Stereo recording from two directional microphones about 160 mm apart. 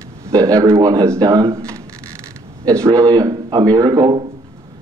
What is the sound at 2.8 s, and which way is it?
Speech, 20° right (ahead or behind).